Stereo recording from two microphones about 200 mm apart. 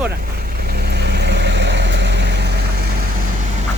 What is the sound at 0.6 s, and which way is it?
Vehicle, 50° right (ahead or behind).